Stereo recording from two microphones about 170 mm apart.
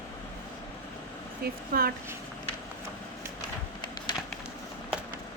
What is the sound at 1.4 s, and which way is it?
Speech, 65° right (ahead or behind).